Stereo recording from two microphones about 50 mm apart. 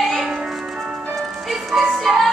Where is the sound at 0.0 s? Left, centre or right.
Centre.